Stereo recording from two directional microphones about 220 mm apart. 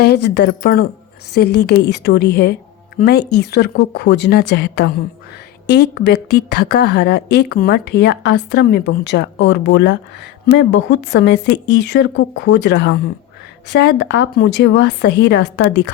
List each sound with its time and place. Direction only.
0.0 s a woman's voice: 50° left (ahead or behind)
3.3 s a woman's voice: 50° left (ahead or behind)